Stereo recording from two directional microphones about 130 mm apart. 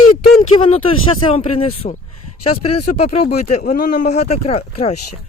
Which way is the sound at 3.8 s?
70° left (ahead or behind).